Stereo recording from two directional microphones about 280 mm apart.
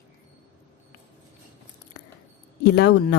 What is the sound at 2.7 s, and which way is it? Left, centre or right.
Speech, left.